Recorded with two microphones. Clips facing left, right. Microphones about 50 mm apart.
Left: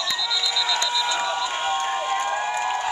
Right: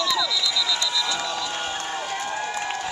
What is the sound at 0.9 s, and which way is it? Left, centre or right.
Crowd, centre.